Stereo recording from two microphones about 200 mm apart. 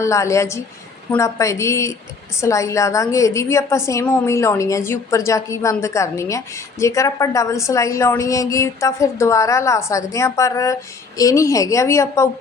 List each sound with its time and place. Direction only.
0.0 s a woman's voice: 15° left (ahead or behind)